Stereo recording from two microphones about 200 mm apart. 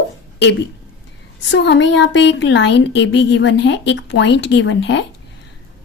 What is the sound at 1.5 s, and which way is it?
A woman's voice, 60° left (ahead or behind).